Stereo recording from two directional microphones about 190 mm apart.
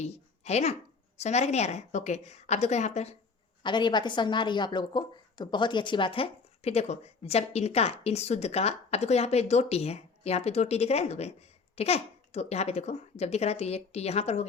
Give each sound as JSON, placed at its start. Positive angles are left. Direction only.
{"t": 0.0, "sound": "a woman's voice", "side_deg": 35}
{"t": 3.6, "sound": "a woman's voice", "side_deg": 25}